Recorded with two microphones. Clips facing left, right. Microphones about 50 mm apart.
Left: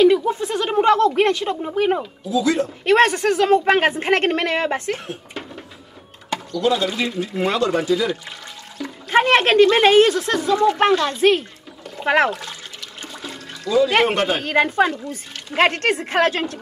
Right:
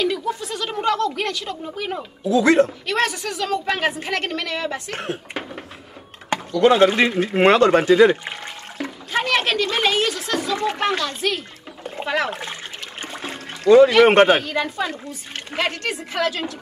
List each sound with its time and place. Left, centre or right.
0.0 s speech: left
2.2 s speech: right
2.8 s a woman's voice: left
4.9 s speech: right
6.3 s speech: right
9.1 s a woman's voice: left
12.3 s speech: right
13.0 s toilet flush: right
13.7 s speech: right
14.4 s a woman's voice: left